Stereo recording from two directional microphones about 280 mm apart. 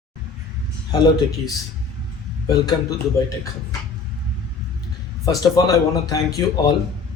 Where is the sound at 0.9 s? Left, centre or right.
Centre.